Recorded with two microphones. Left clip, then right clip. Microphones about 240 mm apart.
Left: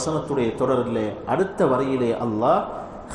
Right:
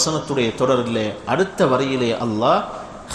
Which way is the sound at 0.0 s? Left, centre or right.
Right.